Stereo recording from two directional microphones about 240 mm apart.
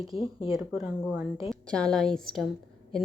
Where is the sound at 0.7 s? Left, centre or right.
Centre.